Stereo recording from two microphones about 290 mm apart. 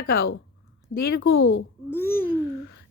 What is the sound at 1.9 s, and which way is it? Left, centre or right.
Speech, centre.